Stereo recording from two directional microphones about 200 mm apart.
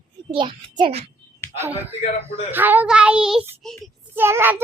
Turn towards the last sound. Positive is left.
turn(degrees=-10)  # may be behind; listen again after turning